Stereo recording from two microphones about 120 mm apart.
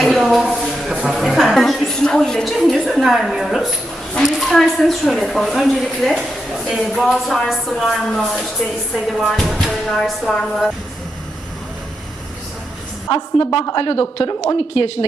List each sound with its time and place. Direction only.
0.0 s speech: centre (ahead or behind)
13.1 s a woman's voice: 45° left (ahead or behind)